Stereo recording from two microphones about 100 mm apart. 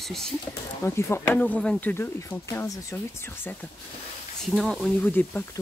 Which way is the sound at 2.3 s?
25° left (ahead or behind).